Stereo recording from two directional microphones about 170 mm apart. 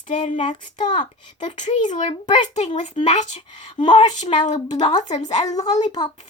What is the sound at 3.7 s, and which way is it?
Speech, 30° left (ahead or behind).